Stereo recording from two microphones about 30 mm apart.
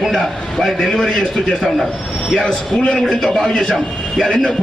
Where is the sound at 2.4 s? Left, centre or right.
Left.